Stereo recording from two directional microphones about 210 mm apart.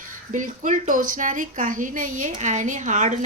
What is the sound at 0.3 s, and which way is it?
A woman's voice, 35° right (ahead or behind).